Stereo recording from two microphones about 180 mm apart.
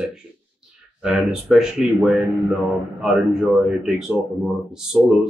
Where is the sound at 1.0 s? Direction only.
5° right (ahead or behind).